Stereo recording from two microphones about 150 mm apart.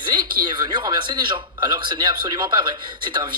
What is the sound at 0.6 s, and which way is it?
Speech, 30° right (ahead or behind).